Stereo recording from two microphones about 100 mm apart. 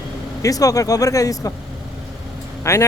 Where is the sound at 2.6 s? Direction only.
30° left (ahead or behind).